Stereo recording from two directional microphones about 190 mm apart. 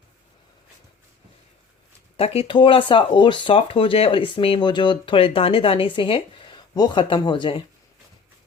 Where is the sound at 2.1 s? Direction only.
30° left (ahead or behind).